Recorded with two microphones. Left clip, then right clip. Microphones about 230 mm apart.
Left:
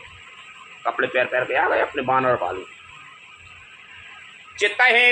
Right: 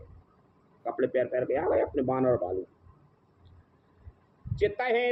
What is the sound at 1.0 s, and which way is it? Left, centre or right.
Speech, left.